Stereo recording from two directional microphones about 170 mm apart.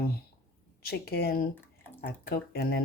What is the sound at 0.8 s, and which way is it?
Speech, 65° left (ahead or behind).